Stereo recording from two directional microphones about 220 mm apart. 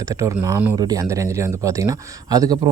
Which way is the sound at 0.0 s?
15° right (ahead or behind).